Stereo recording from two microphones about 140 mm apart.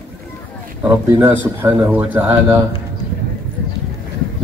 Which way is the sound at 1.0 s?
15° right (ahead or behind).